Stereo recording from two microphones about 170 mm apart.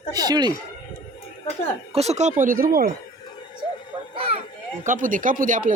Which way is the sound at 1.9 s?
40° right (ahead or behind).